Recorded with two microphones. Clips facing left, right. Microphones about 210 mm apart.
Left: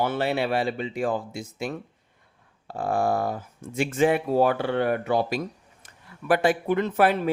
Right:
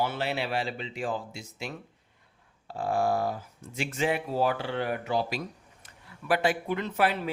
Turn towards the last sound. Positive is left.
turn(degrees=50)  # may be behind; listen again after turning